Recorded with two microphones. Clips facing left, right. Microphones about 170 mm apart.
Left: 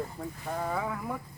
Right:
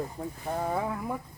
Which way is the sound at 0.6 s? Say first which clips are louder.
Right 2 dB; 20° right (ahead or behind).